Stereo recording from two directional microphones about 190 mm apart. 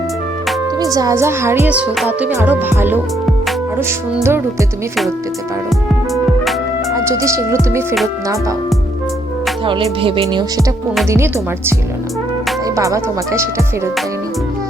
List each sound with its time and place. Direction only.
0.8 s speech: 20° right (ahead or behind)
6.9 s speech: 15° right (ahead or behind)
9.6 s speech: 25° right (ahead or behind)
11.1 s speech: 15° right (ahead or behind)
12.7 s speech: 15° right (ahead or behind)